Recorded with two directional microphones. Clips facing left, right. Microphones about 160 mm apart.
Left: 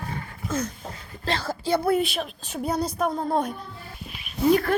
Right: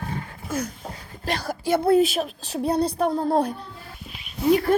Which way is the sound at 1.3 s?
15° right (ahead or behind).